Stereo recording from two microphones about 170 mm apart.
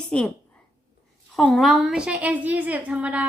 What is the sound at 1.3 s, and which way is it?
A woman's voice, centre (ahead or behind).